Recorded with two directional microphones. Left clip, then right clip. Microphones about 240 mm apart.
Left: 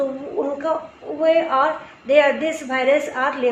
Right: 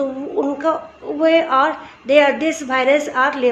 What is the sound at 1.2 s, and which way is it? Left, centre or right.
A woman's voice, right.